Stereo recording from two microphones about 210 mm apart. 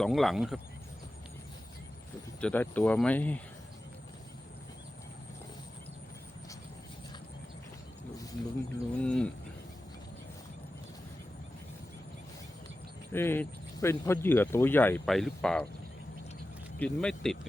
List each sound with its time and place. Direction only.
0.0 s speech: centre (ahead or behind)
2.4 s speech: 5° left (ahead or behind)
9.0 s speech: 5° left (ahead or behind)
13.1 s speech: 10° left (ahead or behind)
16.7 s speech: 5° left (ahead or behind)